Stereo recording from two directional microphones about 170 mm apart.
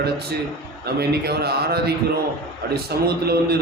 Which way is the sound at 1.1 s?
70° right (ahead or behind).